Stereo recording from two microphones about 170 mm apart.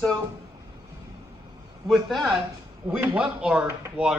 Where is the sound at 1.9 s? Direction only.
Centre (ahead or behind).